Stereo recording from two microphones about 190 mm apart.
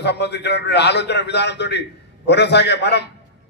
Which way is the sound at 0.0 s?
60° left (ahead or behind).